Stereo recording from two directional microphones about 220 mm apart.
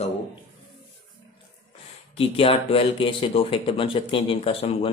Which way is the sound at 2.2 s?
25° left (ahead or behind).